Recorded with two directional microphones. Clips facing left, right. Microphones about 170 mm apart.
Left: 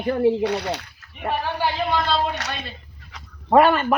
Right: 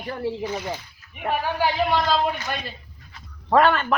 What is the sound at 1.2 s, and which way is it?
A man's voice, 10° right (ahead or behind).